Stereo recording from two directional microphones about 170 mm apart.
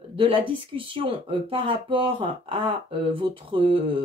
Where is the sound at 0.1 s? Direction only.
35° right (ahead or behind).